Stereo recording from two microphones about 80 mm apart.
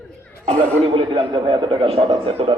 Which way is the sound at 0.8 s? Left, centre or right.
Right.